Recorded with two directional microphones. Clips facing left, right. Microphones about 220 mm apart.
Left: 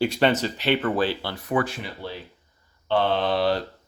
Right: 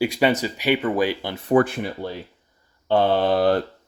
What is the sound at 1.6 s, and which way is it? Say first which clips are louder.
Speech: right 6 dB; 50° right (ahead or behind).